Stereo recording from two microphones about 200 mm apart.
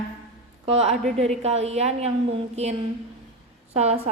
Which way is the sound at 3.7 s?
30° right (ahead or behind).